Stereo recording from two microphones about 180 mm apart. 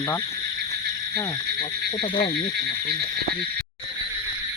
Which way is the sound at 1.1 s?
25° left (ahead or behind).